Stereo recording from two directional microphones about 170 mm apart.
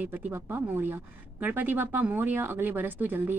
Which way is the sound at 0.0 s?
10° right (ahead or behind).